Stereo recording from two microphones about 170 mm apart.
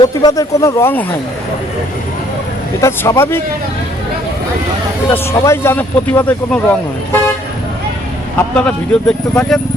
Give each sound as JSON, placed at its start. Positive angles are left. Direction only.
{"t": 0.0, "sound": "speech", "side_deg": 20}
{"t": 2.8, "sound": "speech", "side_deg": 15}
{"t": 5.4, "sound": "speech", "side_deg": 15}
{"t": 8.5, "sound": "speech", "side_deg": 5}